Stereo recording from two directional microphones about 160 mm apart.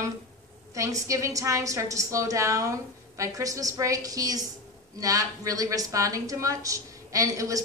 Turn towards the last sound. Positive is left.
turn(degrees=-20)  # may be behind; listen again after turning